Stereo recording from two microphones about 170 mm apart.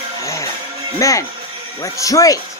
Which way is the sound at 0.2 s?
20° left (ahead or behind).